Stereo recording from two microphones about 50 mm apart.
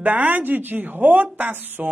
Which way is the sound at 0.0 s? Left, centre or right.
Right.